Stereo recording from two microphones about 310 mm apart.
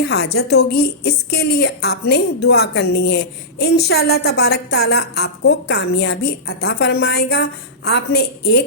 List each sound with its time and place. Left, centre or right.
0.0 s a woman's voice: left